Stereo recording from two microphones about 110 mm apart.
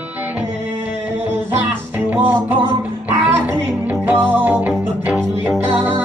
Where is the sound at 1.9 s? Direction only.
20° right (ahead or behind).